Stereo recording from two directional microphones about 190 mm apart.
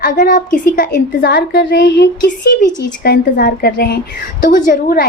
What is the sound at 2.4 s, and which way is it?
A woman's voice, 45° left (ahead or behind).